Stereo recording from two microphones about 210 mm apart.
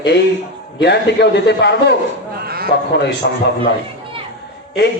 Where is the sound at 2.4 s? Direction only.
45° right (ahead or behind).